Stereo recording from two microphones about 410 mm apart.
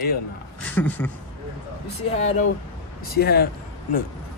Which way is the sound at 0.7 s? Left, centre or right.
Centre.